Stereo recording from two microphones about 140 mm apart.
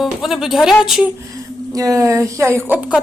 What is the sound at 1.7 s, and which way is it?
Speech, 25° right (ahead or behind).